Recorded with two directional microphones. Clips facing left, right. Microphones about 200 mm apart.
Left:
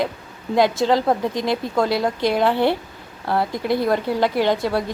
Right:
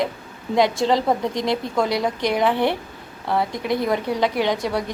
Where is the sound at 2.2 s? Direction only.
20° right (ahead or behind).